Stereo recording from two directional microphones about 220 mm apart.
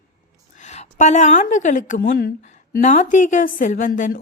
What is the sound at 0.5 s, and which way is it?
A woman's voice, 30° left (ahead or behind).